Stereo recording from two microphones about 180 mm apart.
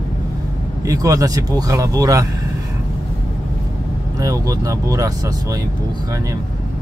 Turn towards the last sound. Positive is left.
turn(degrees=-20)  # may be behind; listen again after turning